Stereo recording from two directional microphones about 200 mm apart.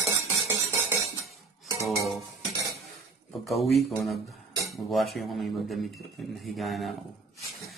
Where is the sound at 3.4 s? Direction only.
Centre (ahead or behind).